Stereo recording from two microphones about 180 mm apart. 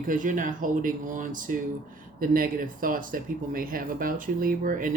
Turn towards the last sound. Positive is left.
turn(degrees=-50)  # may be behind; listen again after turning